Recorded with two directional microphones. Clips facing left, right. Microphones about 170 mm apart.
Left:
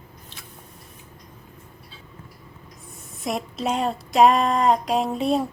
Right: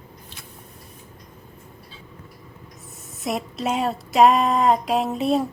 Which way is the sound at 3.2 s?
Centre (ahead or behind).